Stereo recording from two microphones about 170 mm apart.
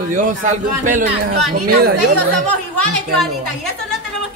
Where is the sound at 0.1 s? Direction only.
50° right (ahead or behind).